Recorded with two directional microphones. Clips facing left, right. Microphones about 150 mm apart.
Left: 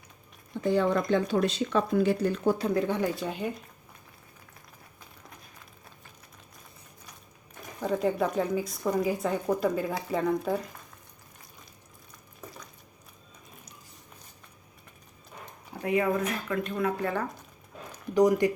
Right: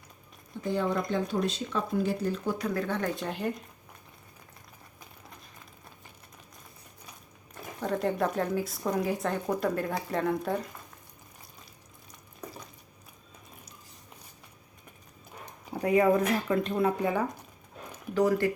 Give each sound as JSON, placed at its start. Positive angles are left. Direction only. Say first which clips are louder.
{"t": 0.6, "sound": "speech", "louder": "left 4 dB", "side_deg": 75}
{"t": 2.6, "sound": "speech", "louder": "left 4 dB", "side_deg": 25}
{"t": 2.8, "sound": "speech", "louder": "left 3 dB", "side_deg": 15}
{"t": 3.2, "sound": "speech", "louder": "even", "side_deg": 0}
{"t": 7.8, "sound": "speech", "louder": "left 2 dB", "side_deg": 5}
{"t": 15.8, "sound": "speech", "louder": "right 3 dB", "side_deg": -35}
{"t": 17.0, "sound": "speech", "louder": "right 2 dB", "side_deg": -15}
{"t": 18.1, "sound": "speech", "louder": "left 3 dB", "side_deg": 15}